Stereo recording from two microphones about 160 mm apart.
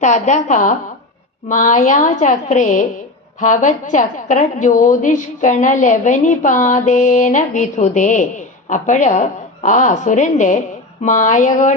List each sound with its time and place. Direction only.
0.0 s a woman's voice: 50° left (ahead or behind)